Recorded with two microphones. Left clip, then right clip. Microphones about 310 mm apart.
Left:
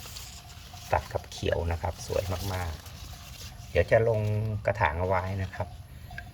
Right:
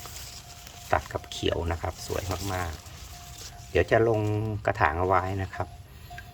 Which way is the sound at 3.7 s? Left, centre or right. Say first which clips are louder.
Right 1 dB; centre.